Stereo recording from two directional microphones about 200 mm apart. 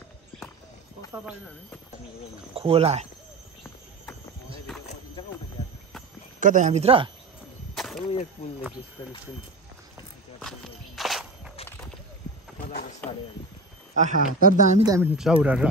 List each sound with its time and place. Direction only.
2.5 s speech: 30° right (ahead or behind)
4.7 s a sound: centre (ahead or behind)
6.4 s speech: 40° right (ahead or behind)
7.7 s arrow: centre (ahead or behind)
10.4 s walk: centre (ahead or behind)
13.0 s a sound: 5° left (ahead or behind)
13.9 s speech: 40° right (ahead or behind)
14.9 s speech: 10° right (ahead or behind)